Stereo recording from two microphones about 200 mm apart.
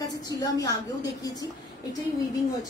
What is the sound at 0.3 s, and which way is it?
Speech, 20° left (ahead or behind).